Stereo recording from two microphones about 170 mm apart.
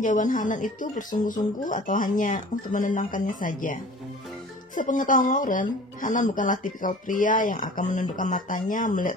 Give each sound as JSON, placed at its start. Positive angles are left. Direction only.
{"t": 0.0, "sound": "speech", "side_deg": 50}